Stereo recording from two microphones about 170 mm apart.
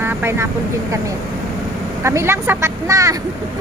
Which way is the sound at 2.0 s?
15° right (ahead or behind).